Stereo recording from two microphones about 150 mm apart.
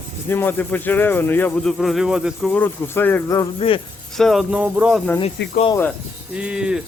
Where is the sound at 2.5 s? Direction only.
10° left (ahead or behind).